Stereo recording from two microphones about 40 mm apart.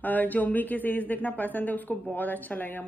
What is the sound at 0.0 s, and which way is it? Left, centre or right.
Speech, left.